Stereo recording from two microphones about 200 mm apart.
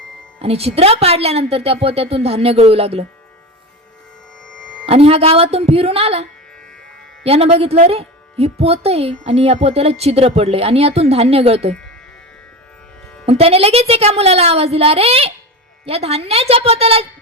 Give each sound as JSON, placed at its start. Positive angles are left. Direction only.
{"t": 0.3, "sound": "a woman's voice", "side_deg": -30}
{"t": 4.4, "sound": "music", "side_deg": 5}
{"t": 4.9, "sound": "a woman's voice", "side_deg": -30}
{"t": 7.3, "sound": "speech", "side_deg": -30}
{"t": 13.2, "sound": "speech", "side_deg": -30}